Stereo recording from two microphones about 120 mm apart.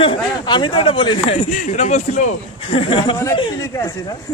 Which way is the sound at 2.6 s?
45° left (ahead or behind).